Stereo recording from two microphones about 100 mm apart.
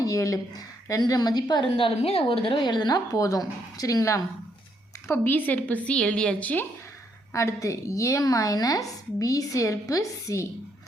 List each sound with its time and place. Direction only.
0.0 s a woman's voice: 35° left (ahead or behind)
1.7 s speech: 70° left (ahead or behind); by 4.2 s 35° left (ahead or behind)
5.0 s a woman's voice: 20° left (ahead or behind)
7.3 s a woman's voice: 30° left (ahead or behind)